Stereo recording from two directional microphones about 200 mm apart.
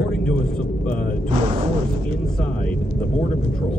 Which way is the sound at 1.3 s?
30° right (ahead or behind).